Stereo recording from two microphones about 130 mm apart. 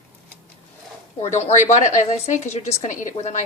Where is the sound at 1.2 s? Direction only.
65° left (ahead or behind).